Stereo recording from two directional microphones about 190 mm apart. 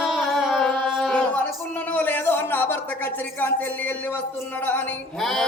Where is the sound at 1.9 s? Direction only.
10° left (ahead or behind).